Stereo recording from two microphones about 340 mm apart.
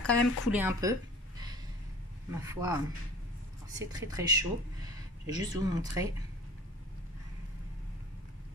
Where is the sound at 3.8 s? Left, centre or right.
Centre.